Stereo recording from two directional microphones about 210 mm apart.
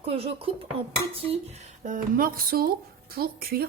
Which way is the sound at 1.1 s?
25° right (ahead or behind).